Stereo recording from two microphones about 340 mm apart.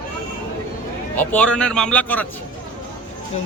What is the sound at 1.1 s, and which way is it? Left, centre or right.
Speech, centre.